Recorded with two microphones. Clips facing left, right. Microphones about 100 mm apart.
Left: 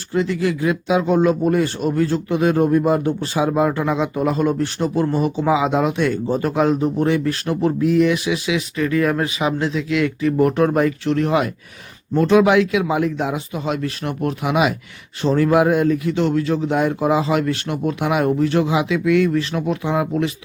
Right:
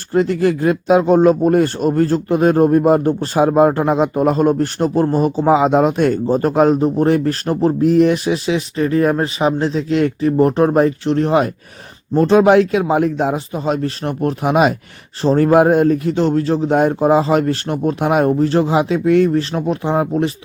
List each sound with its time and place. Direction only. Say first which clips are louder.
0.1 s speech: right 5 dB; 45° right (ahead or behind)